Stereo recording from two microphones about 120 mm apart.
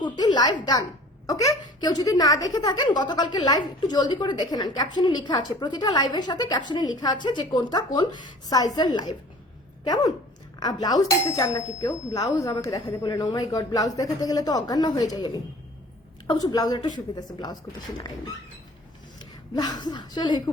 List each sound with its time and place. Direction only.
0.0 s a woman's voice: 40° left (ahead or behind)
19.2 s a woman's voice: 35° left (ahead or behind)